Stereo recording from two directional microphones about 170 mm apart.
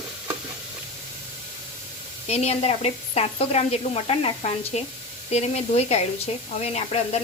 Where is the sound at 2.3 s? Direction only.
40° left (ahead or behind).